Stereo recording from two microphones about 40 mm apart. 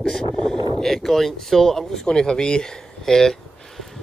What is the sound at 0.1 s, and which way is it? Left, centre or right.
Speech, centre.